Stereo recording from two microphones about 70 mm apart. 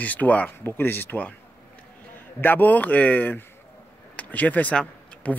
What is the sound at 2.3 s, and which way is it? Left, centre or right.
Speech, left.